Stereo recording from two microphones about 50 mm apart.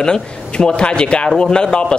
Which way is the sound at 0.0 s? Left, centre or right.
Centre.